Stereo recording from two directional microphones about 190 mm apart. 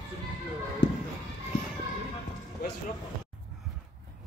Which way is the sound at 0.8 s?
65° left (ahead or behind).